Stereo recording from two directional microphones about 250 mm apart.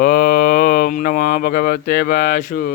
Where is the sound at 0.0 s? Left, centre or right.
Left.